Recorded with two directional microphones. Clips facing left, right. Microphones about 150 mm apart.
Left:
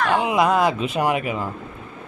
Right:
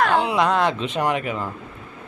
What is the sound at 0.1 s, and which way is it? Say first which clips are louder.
Speech: left 1 dB; 10° left (ahead or behind).